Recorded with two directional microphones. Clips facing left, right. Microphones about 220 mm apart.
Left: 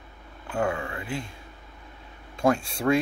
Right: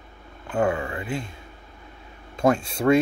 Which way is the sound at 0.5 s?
5° right (ahead or behind).